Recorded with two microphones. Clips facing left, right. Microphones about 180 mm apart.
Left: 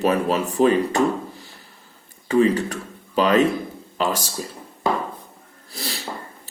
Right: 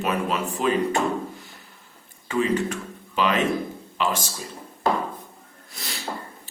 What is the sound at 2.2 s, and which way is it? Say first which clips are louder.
Speech: left 5 dB; 35° left (ahead or behind).